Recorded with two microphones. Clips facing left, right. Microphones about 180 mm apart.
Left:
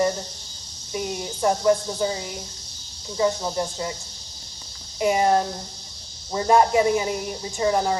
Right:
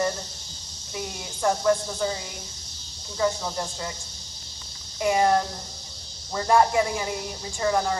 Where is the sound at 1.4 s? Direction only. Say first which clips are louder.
Left 2 dB; 20° left (ahead or behind).